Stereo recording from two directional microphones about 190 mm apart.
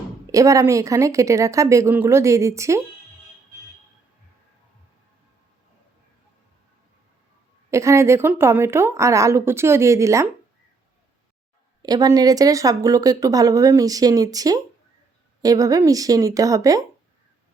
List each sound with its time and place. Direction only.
0.3 s a woman's voice: 15° right (ahead or behind)
7.7 s a woman's voice: 15° right (ahead or behind)
11.8 s speech: 20° right (ahead or behind)